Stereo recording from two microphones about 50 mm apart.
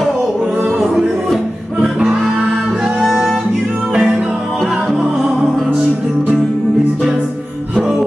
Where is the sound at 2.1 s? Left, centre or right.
Centre.